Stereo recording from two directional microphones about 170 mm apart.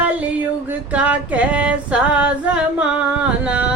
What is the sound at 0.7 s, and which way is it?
Female singing, 10° right (ahead or behind).